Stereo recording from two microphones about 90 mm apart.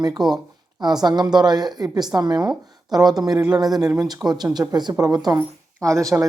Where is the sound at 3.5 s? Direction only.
45° right (ahead or behind).